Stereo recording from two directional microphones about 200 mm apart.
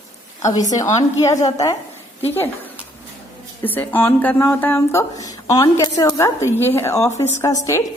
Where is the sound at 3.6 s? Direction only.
10° left (ahead or behind).